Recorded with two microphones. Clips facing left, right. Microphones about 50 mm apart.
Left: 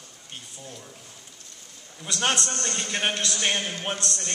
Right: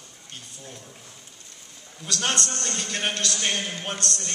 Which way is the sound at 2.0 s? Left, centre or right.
Centre.